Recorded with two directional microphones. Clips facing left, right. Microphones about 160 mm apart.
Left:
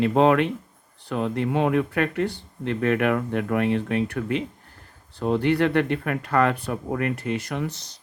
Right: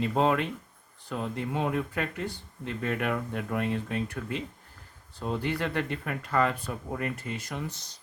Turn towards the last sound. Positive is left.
turn(degrees=75)  # may be behind; listen again after turning